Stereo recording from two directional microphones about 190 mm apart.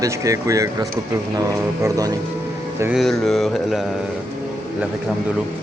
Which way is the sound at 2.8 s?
Centre (ahead or behind).